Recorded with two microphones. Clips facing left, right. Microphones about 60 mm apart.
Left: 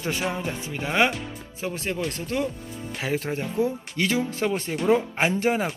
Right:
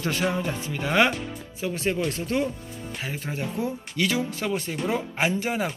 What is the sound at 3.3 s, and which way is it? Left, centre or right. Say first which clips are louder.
Speech: even; left.